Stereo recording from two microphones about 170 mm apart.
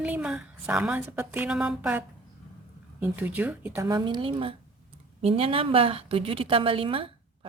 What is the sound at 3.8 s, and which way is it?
A woman's voice, 25° right (ahead or behind).